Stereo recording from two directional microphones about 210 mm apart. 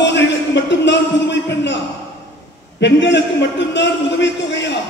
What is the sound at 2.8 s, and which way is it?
A man's voice, 55° left (ahead or behind).